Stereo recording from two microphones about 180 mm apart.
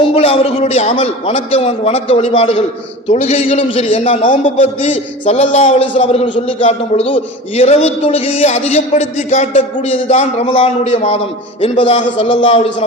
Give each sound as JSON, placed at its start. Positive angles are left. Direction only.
{"t": 0.1, "sound": "a man's voice", "side_deg": 30}